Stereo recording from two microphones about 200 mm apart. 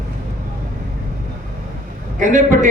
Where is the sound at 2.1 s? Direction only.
40° right (ahead or behind).